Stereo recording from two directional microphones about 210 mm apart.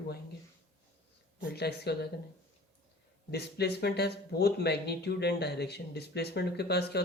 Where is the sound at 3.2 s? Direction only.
50° left (ahead or behind).